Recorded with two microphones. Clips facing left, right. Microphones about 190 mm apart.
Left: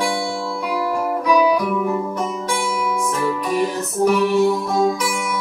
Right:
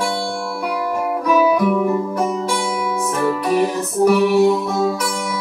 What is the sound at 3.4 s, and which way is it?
Music, 40° right (ahead or behind).